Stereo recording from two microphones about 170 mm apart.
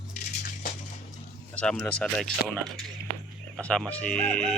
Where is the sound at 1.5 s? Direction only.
5° left (ahead or behind).